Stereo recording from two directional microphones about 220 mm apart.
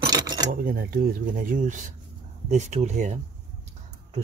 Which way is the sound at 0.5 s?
45° right (ahead or behind).